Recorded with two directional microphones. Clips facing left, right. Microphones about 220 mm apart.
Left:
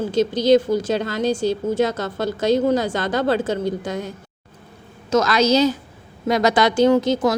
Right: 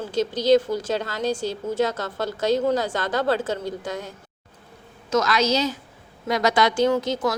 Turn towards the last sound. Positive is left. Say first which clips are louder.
# left 5 dB
turn(degrees=25)  # may be behind; listen again after turning